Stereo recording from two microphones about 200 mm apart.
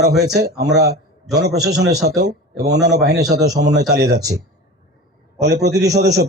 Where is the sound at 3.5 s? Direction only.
55° right (ahead or behind).